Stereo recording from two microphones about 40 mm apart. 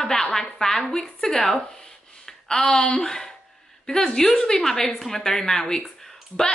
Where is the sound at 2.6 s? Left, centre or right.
Centre.